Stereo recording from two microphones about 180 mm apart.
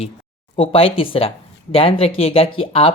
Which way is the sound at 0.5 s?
30° left (ahead or behind).